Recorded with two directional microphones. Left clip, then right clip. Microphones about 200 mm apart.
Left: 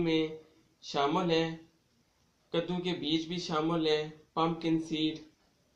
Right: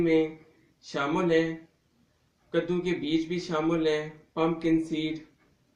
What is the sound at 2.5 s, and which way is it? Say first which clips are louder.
Speech: right 5 dB; 30° left (ahead or behind).